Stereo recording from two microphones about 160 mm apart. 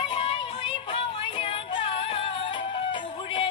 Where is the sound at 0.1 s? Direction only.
35° left (ahead or behind).